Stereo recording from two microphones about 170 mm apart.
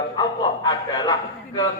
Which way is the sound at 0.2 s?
20° left (ahead or behind).